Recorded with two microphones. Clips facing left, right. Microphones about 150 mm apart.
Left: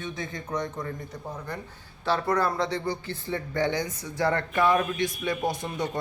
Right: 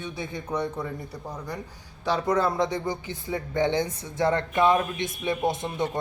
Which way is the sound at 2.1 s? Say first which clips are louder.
Right 1 dB; 20° right (ahead or behind).